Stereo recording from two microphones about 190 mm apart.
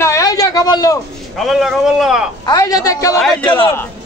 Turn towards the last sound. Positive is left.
turn(degrees=5)  # may be behind; listen again after turning